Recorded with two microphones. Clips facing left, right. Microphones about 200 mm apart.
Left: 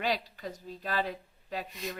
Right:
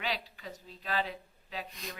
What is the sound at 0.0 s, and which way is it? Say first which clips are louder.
A woman's voice: left 5 dB; 45° left (ahead or behind).